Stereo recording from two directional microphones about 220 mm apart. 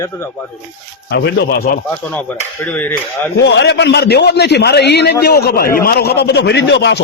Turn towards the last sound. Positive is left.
turn(degrees=50)  # may be behind; listen again after turning